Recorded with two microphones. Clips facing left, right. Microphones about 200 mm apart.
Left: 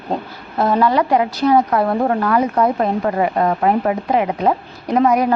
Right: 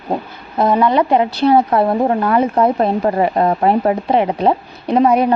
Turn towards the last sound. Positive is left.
turn(degrees=-25)  # may be behind; listen again after turning